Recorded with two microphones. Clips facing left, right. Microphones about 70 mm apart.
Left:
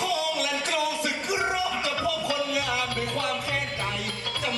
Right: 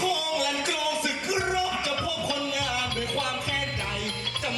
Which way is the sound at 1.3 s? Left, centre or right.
Left.